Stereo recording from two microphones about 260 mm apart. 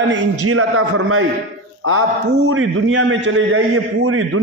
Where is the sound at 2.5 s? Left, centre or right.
Right.